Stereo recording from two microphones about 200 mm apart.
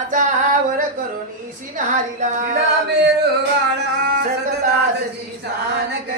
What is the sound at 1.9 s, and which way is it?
Singing, 40° right (ahead or behind).